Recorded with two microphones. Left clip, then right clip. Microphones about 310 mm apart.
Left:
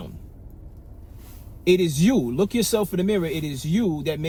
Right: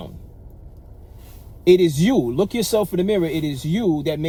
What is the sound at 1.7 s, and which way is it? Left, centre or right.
Speech, right.